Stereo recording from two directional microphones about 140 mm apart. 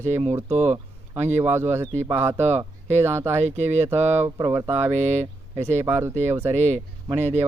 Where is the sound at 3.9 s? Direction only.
15° right (ahead or behind).